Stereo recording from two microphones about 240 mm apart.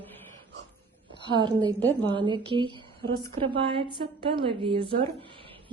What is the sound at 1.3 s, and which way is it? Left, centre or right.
A woman's voice, centre.